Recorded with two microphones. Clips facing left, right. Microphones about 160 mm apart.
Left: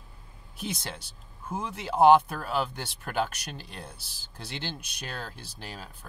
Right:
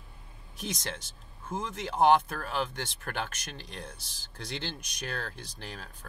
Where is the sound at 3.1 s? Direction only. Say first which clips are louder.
Left 8 dB; 5° left (ahead or behind).